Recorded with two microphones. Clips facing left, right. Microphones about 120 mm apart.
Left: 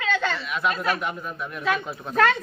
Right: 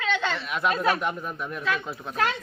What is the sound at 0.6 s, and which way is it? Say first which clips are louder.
Speech: right 1 dB; 5° right (ahead or behind).